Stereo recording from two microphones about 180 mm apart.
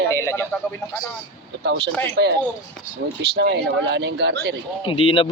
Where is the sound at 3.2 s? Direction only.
65° right (ahead or behind).